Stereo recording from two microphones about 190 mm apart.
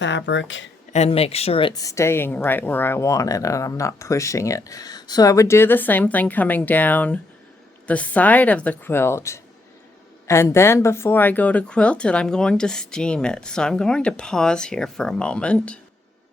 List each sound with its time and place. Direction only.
0.0 s speech: 70° left (ahead or behind)
0.9 s speech: 35° left (ahead or behind); by 15.8 s 5° left (ahead or behind)